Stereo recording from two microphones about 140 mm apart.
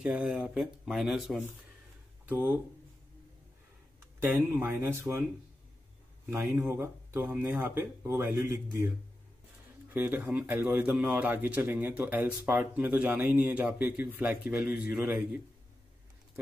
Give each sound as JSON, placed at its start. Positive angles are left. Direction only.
{"t": 0.0, "sound": "speech", "side_deg": -5}
{"t": 2.2, "sound": "speech", "side_deg": -15}
{"t": 4.2, "sound": "a man's voice", "side_deg": -15}
{"t": 6.4, "sound": "a man's voice", "side_deg": -15}
{"t": 9.9, "sound": "a man's voice", "side_deg": -15}